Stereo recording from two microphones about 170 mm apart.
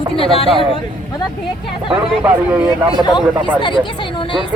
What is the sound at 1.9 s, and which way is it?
Speech, 10° right (ahead or behind).